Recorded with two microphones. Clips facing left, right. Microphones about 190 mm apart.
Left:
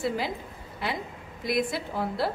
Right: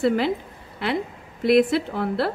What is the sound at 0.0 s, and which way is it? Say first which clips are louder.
A woman's voice: right 8 dB; 65° right (ahead or behind).